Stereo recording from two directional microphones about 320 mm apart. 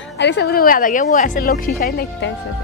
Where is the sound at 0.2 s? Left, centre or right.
Left.